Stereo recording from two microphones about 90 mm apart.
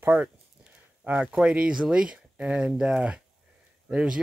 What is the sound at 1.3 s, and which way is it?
Speech, 10° right (ahead or behind).